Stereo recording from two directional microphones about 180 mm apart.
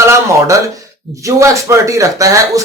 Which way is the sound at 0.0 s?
15° right (ahead or behind).